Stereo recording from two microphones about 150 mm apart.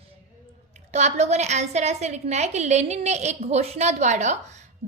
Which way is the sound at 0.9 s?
50° right (ahead or behind).